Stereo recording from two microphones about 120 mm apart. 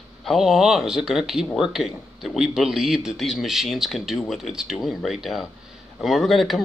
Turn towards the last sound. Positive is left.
turn(degrees=0)  # may be behind; listen again after turning